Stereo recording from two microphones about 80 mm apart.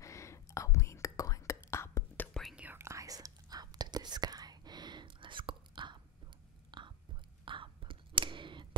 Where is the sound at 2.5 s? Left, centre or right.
Centre.